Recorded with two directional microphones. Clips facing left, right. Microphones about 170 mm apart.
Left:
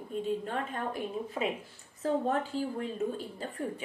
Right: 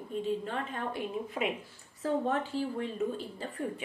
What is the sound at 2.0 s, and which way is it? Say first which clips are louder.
Speech: left 1 dB; 40° left (ahead or behind).